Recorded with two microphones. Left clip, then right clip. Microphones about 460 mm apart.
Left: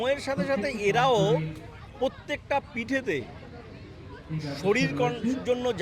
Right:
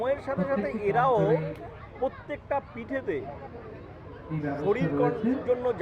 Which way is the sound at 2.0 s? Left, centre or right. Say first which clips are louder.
Left 2 dB; left.